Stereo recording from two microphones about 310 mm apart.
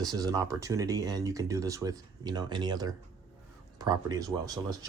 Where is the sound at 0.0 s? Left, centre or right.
Centre.